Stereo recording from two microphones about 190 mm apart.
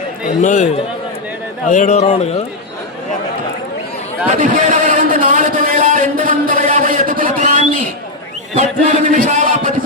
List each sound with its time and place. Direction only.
0.4 s speech: 40° left (ahead or behind)
4.3 s a sound: 40° right (ahead or behind)
8.5 s chant: 35° right (ahead or behind)